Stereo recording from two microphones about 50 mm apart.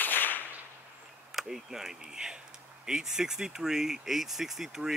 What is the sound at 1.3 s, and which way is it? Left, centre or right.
Speech, centre.